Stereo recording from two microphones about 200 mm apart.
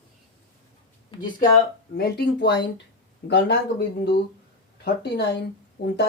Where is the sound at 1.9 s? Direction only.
55° left (ahead or behind).